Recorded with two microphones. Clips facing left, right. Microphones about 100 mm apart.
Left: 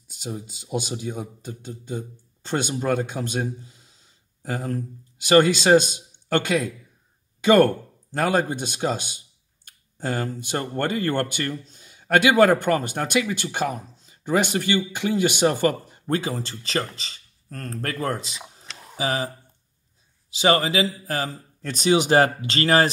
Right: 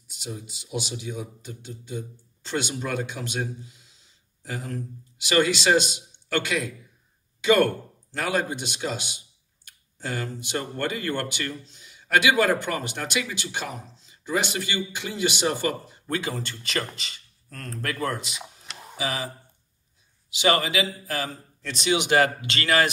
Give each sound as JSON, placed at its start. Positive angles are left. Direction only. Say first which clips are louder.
{"t": 0.1, "sound": "a man's voice", "louder": "left 4 dB", "side_deg": 45}
{"t": 18.7, "sound": "a sound", "louder": "right 1 dB", "side_deg": -5}
{"t": 18.9, "sound": "speech", "louder": "left 4 dB", "side_deg": 40}